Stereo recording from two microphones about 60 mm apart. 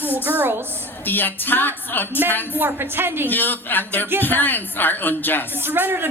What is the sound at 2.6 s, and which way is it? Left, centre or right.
Speech, right.